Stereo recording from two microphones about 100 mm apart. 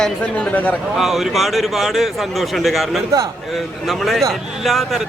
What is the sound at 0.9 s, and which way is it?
A man's voice, 5° right (ahead or behind).